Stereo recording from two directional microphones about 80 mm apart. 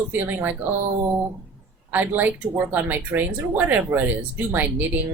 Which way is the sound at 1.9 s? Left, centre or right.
Right.